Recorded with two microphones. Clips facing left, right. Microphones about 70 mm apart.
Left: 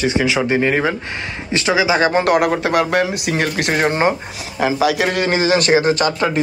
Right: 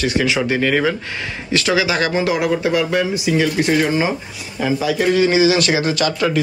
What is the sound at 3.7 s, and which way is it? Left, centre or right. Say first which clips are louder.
Speech: left 4 dB; left.